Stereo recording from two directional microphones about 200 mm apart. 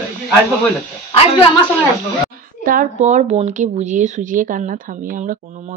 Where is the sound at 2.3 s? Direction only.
45° right (ahead or behind).